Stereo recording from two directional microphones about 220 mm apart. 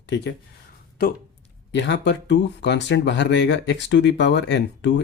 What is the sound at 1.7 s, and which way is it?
Speech, 55° left (ahead or behind).